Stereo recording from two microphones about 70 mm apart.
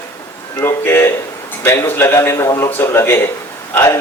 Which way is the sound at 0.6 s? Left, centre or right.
Left.